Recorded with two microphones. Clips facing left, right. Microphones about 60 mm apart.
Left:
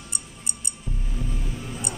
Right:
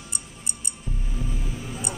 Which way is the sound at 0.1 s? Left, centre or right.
Centre.